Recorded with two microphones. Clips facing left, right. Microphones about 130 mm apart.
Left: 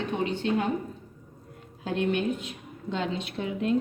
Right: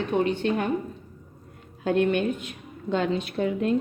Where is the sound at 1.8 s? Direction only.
55° right (ahead or behind).